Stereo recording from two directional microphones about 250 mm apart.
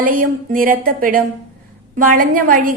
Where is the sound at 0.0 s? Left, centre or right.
Right.